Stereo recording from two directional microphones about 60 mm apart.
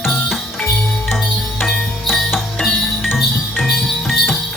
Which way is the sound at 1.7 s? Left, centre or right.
Centre.